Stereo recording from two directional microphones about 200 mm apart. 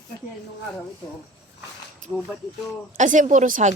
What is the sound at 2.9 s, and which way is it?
Speech, 40° right (ahead or behind).